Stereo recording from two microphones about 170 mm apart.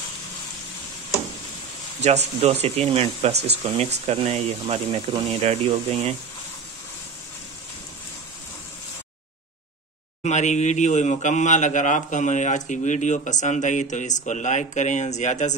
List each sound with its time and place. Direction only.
2.0 s speech: 40° right (ahead or behind)
10.2 s a man's voice: 45° left (ahead or behind)